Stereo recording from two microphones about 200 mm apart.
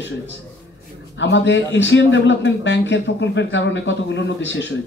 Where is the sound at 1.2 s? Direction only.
65° left (ahead or behind).